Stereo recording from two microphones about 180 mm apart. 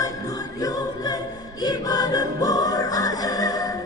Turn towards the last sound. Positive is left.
turn(degrees=20)  # may be behind; listen again after turning